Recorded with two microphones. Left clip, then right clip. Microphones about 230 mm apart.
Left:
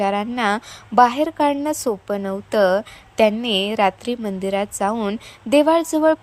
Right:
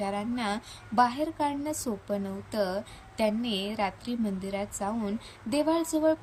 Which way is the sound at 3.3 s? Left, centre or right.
Centre.